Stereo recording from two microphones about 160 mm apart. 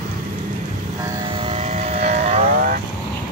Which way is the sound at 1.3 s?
35° right (ahead or behind).